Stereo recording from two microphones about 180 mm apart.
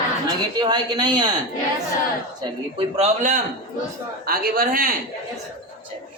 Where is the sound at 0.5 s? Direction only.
25° right (ahead or behind).